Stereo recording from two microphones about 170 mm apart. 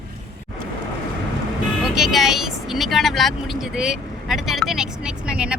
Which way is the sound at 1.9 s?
Centre (ahead or behind).